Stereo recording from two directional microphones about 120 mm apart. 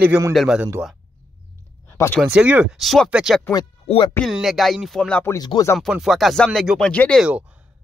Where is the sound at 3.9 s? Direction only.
60° left (ahead or behind).